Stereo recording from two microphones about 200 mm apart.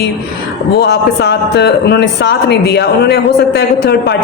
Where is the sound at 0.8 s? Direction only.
55° left (ahead or behind).